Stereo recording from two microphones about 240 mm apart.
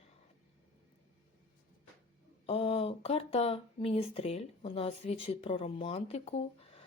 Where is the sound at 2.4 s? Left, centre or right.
Left.